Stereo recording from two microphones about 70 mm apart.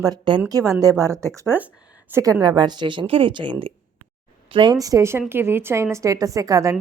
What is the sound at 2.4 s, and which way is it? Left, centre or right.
Speech, right.